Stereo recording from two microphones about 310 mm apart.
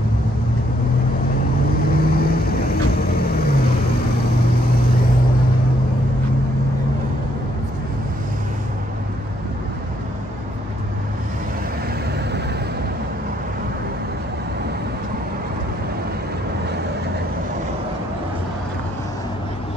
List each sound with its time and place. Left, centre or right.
1.8 s vehicle: left